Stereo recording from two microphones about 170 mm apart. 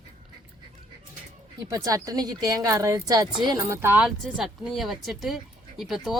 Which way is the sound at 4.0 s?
Centre (ahead or behind).